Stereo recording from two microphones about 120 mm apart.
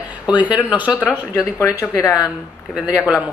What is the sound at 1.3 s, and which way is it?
Speech, 25° left (ahead or behind).